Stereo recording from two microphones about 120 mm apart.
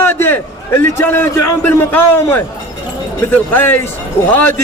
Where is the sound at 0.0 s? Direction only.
15° left (ahead or behind).